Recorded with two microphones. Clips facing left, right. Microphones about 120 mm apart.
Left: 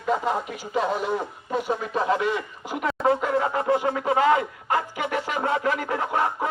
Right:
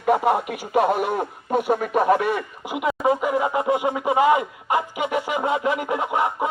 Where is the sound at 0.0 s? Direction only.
60° right (ahead or behind).